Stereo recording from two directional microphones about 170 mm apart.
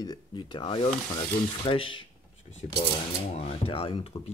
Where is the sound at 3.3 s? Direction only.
35° left (ahead or behind).